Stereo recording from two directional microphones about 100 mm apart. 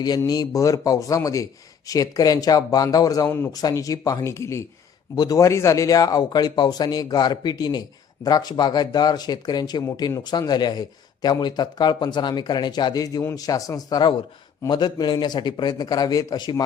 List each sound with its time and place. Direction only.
0.3 s speech: 35° left (ahead or behind)
3.2 s speech: 20° left (ahead or behind)
3.5 s speech: 40° left (ahead or behind)
5.1 s speech: 40° left (ahead or behind)